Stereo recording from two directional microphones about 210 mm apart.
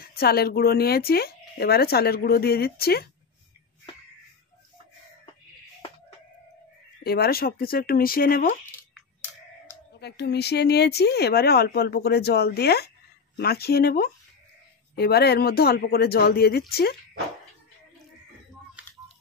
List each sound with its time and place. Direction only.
0.1 s speech: 45° left (ahead or behind)
7.0 s speech: 45° left (ahead or behind)
9.9 s speech: 50° left (ahead or behind)
18.8 s a sound: 5° right (ahead or behind)